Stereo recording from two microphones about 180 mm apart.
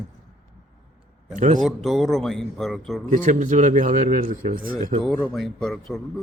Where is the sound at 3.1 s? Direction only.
45° right (ahead or behind).